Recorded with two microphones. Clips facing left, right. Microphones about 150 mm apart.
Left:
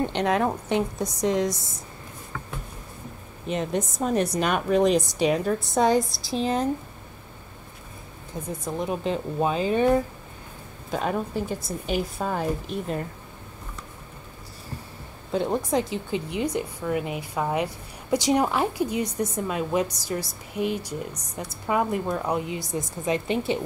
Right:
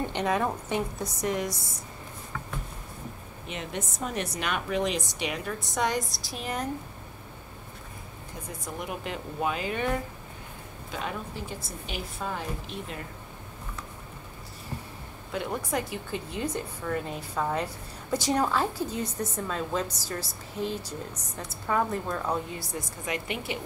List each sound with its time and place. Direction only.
0.0 s a woman's voice: 15° left (ahead or behind)
1.2 s speech: 90° left
3.4 s a woman's voice: 40° left (ahead or behind)
8.5 s a woman's voice: 25° left (ahead or behind)
10.9 s a woman's voice: 45° left (ahead or behind)
15.3 s a woman's voice: 30° left (ahead or behind)